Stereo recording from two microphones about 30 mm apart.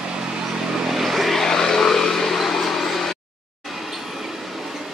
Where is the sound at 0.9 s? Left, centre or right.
Centre.